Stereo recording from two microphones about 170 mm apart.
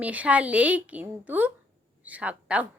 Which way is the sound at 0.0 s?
10° right (ahead or behind).